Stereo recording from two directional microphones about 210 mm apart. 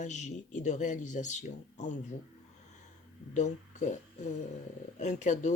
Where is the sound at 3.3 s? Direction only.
35° left (ahead or behind).